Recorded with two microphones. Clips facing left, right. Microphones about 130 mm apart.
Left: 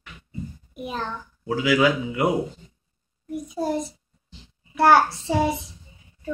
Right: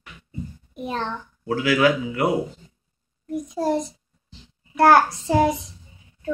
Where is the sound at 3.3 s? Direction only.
Centre (ahead or behind).